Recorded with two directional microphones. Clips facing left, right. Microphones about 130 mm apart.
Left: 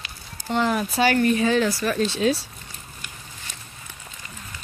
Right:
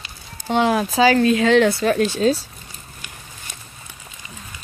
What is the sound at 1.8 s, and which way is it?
Speech, 60° right (ahead or behind).